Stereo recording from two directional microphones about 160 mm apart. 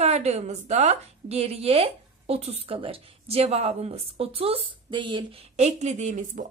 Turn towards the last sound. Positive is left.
turn(degrees=-50)  # may be behind; listen again after turning